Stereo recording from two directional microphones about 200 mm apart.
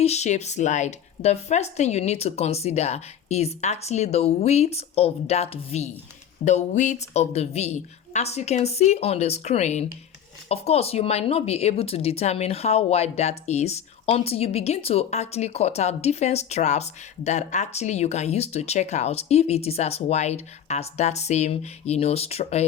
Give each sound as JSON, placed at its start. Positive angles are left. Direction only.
{"t": 0.0, "sound": "speech", "side_deg": 35}